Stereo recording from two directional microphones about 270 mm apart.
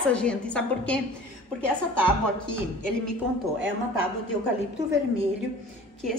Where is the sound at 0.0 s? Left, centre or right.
Centre.